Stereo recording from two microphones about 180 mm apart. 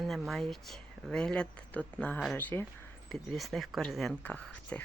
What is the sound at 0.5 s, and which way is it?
Speech, centre (ahead or behind).